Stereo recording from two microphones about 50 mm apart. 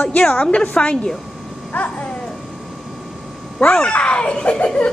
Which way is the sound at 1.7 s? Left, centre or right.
Left.